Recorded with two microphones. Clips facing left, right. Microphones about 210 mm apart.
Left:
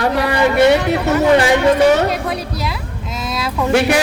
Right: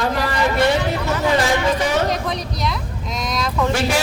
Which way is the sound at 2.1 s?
5° left (ahead or behind).